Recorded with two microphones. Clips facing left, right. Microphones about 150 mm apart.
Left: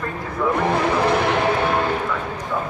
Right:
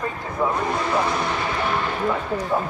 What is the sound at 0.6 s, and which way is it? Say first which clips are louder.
Speech: left 4 dB; 65° left (ahead or behind).